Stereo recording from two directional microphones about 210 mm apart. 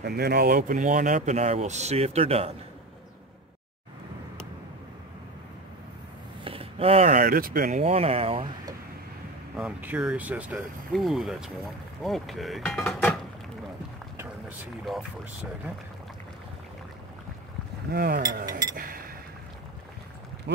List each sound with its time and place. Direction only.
0.0 s speech: 50° right (ahead or behind); by 2.5 s 30° right (ahead or behind)
6.4 s speech: 25° right (ahead or behind); by 7.8 s 45° right (ahead or behind)
7.8 s speech: 30° right (ahead or behind)
9.6 s speech: 5° right (ahead or behind)
17.9 s speech: 45° right (ahead or behind)
18.4 s speech: 15° right (ahead or behind)
18.8 s a sound: 45° right (ahead or behind)
20.5 s a sound: 55° right (ahead or behind)